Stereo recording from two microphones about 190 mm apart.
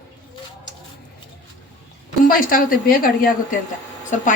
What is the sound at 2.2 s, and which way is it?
A woman's voice, 45° left (ahead or behind).